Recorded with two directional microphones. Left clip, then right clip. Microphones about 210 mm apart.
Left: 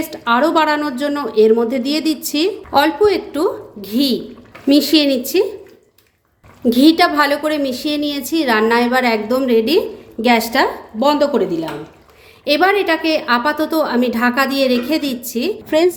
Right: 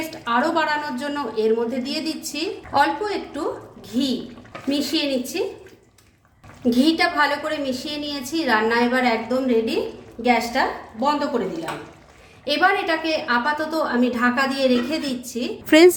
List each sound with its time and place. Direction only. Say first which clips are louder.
0.1 s a woman's voice: left 7 dB; 35° left (ahead or behind)
6.7 s a woman's voice: left 7 dB; 35° left (ahead or behind); by 11.4 s 55° left (ahead or behind)
12.5 s a woman's voice: left 5 dB; 35° left (ahead or behind)
15.6 s a woman's voice: right 2 dB; 20° right (ahead or behind)